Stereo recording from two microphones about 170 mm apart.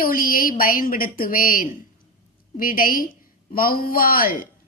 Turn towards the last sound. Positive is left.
turn(degrees=55)  # may be behind; listen again after turning